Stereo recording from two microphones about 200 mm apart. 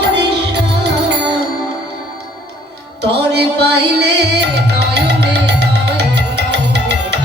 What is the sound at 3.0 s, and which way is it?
Music, 55° right (ahead or behind).